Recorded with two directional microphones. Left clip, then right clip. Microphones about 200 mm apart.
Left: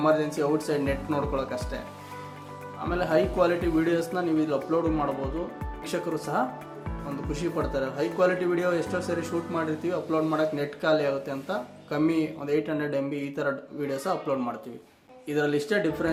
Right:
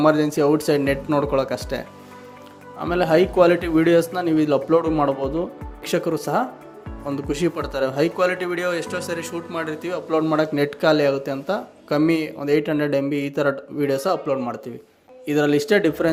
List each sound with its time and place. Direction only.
0.0 s speech: 40° right (ahead or behind)
2.8 s speech: 35° right (ahead or behind)